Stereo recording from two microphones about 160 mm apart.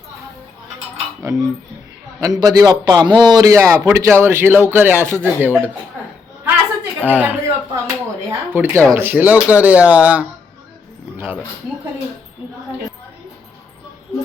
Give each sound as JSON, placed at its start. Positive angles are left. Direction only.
{"t": 1.2, "sound": "a man's voice", "side_deg": -20}
{"t": 7.0, "sound": "a sound", "side_deg": -10}
{"t": 8.5, "sound": "a man's voice", "side_deg": -10}